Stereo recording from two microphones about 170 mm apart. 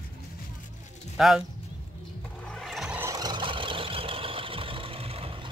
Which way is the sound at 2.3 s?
5° left (ahead or behind).